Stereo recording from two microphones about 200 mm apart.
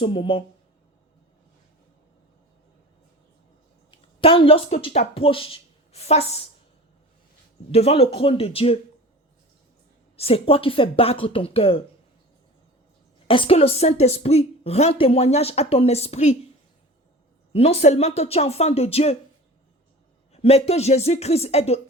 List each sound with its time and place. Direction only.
0.0 s speech: 25° left (ahead or behind)
3.9 s speech: 25° left (ahead or behind)
7.7 s speech: 30° left (ahead or behind)
10.2 s speech: 30° left (ahead or behind)
13.2 s speech: 25° left (ahead or behind)
17.5 s speech: 30° left (ahead or behind)
20.3 s speech: 30° left (ahead or behind)